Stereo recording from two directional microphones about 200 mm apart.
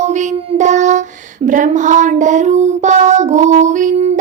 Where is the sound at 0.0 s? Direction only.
35° right (ahead or behind).